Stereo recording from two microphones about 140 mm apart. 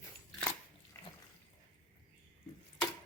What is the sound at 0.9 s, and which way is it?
Water, 20° left (ahead or behind).